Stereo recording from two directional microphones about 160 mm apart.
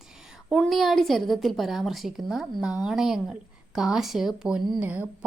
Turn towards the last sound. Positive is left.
turn(degrees=-10)  # may be behind; listen again after turning